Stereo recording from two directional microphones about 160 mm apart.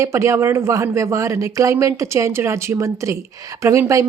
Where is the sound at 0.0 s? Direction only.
20° right (ahead or behind).